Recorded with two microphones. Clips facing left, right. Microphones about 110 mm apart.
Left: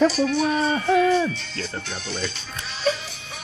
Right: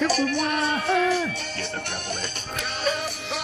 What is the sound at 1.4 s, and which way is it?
Music, 55° right (ahead or behind).